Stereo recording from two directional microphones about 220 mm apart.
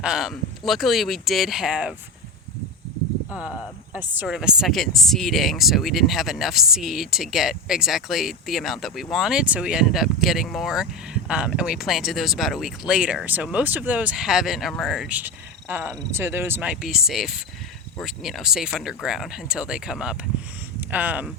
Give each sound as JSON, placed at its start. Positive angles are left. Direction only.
{"t": 0.0, "sound": "speech", "side_deg": 0}
{"t": 3.9, "sound": "speech", "side_deg": -5}